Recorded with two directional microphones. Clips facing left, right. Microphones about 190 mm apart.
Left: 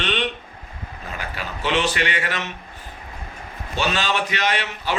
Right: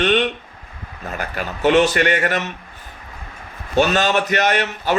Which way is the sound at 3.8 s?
50° right (ahead or behind).